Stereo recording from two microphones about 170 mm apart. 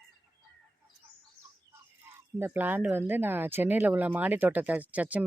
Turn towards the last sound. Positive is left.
turn(degrees=-10)  # may be behind; listen again after turning